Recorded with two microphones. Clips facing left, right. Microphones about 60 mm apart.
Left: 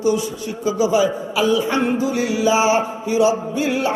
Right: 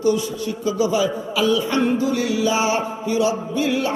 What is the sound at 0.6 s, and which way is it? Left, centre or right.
Speech, centre.